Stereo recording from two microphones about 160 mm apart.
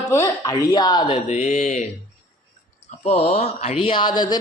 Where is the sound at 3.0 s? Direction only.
40° left (ahead or behind).